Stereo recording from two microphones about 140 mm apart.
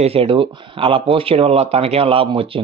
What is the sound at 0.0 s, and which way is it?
Speech, 45° right (ahead or behind).